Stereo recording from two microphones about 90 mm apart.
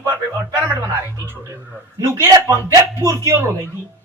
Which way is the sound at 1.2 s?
30° right (ahead or behind).